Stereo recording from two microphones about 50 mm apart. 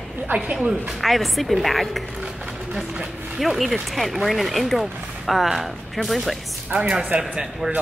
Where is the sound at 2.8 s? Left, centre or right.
Centre.